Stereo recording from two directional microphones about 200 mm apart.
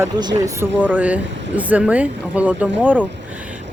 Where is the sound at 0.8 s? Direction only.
10° right (ahead or behind).